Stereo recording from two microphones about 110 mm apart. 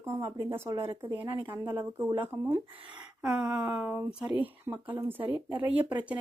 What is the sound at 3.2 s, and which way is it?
Speech, 10° right (ahead or behind).